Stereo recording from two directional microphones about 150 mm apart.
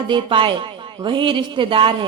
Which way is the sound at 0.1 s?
35° right (ahead or behind).